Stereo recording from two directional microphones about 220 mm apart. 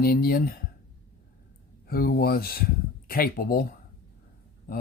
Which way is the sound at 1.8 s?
40° left (ahead or behind).